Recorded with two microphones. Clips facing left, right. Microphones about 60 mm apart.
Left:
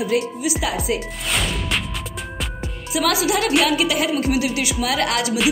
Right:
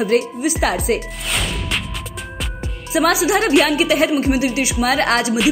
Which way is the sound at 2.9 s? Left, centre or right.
Right.